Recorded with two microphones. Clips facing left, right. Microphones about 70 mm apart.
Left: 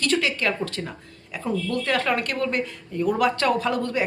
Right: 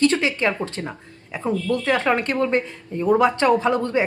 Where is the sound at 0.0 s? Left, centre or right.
Right.